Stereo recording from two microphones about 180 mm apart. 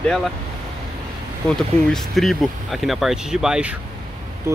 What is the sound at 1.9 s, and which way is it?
Speech, centre (ahead or behind).